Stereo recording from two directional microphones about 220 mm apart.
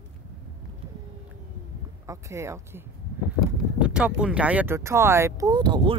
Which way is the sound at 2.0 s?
15° right (ahead or behind).